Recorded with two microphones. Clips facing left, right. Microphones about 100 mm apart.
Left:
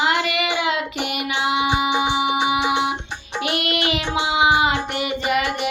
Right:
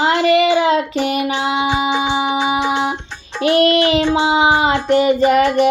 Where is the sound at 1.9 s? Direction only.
15° left (ahead or behind).